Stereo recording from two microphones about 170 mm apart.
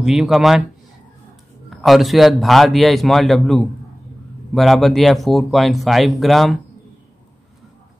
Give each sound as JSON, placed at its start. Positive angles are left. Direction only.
{"t": 0.0, "sound": "speech", "side_deg": 0}
{"t": 1.7, "sound": "speech", "side_deg": 0}